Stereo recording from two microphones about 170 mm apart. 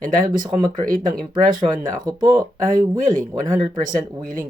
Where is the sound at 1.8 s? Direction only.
20° right (ahead or behind).